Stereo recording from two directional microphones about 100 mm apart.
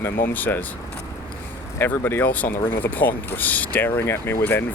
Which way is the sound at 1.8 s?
20° left (ahead or behind).